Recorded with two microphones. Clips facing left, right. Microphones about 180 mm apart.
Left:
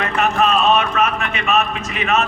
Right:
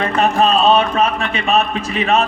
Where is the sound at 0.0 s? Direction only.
30° right (ahead or behind).